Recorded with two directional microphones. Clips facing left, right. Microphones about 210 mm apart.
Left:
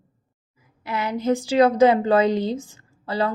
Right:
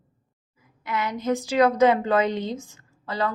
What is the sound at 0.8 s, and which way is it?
A woman's voice, 30° left (ahead or behind).